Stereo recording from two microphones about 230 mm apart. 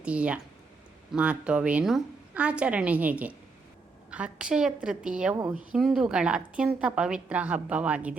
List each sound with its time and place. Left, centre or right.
0.0 s a woman's voice: centre
5.7 s a woman's voice: centre